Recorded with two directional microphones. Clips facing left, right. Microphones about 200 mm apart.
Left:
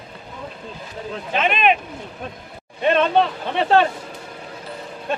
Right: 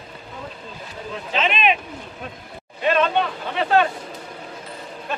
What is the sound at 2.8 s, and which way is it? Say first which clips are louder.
Speech: left 3 dB; 30° left (ahead or behind).